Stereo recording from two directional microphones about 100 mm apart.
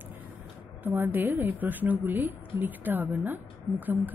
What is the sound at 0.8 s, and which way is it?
A woman's voice, 20° right (ahead or behind).